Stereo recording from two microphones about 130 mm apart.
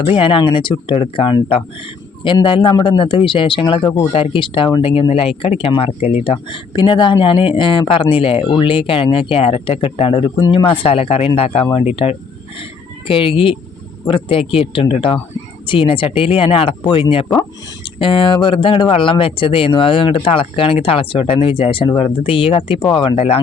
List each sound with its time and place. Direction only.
0.0 s speech: 45° left (ahead or behind)
3.9 s speech: 50° left (ahead or behind)
13.1 s speech: 40° left (ahead or behind)
23.1 s speech: 60° left (ahead or behind)